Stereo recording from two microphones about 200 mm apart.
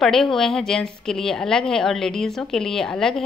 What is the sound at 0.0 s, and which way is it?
A woman's voice, centre (ahead or behind).